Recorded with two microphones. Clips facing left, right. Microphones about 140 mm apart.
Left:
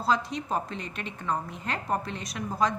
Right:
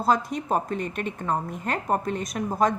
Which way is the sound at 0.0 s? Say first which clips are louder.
Right 4 dB; 50° right (ahead or behind).